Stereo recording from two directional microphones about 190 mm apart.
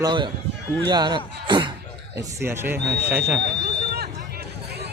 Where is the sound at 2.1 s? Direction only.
15° right (ahead or behind).